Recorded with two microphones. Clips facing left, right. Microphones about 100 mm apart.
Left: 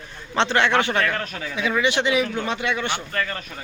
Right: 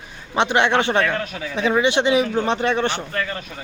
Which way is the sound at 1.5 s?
30° right (ahead or behind).